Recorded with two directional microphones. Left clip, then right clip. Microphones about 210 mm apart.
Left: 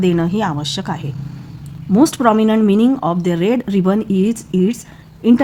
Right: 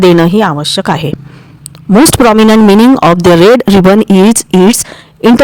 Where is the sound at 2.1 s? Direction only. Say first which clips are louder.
Right 9 dB; 50° right (ahead or behind).